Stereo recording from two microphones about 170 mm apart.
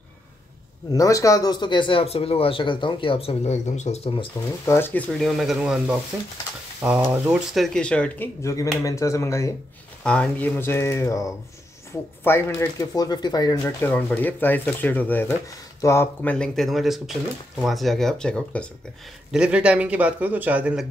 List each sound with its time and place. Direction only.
0.9 s speech: 20° left (ahead or behind)
4.6 s speech: 15° left (ahead or behind)
8.4 s speech: 20° left (ahead or behind)
10.0 s speech: 5° left (ahead or behind)
19.3 s a man's voice: 5° right (ahead or behind)